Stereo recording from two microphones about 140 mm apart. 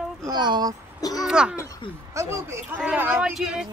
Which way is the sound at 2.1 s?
20° right (ahead or behind).